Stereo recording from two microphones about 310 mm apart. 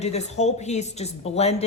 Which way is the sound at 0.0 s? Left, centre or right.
Left.